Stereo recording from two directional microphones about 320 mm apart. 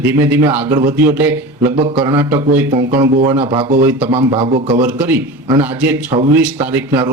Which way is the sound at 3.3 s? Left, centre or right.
Centre.